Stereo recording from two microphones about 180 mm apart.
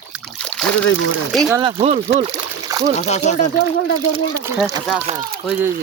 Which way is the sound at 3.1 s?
40° left (ahead or behind).